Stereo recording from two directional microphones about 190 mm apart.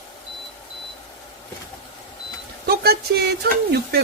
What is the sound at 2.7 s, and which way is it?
Speech, 55° right (ahead or behind).